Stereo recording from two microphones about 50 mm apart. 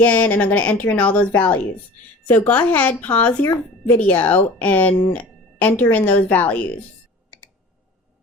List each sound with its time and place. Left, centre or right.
0.0 s speech: left